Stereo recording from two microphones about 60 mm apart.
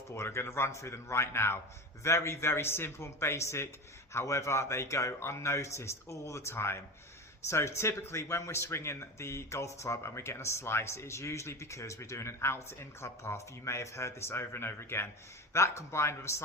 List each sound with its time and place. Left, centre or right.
0.1 s speech: left